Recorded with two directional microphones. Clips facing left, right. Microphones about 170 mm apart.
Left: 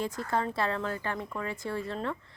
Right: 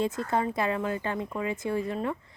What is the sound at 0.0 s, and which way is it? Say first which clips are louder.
Speech: right 3 dB; 20° right (ahead or behind).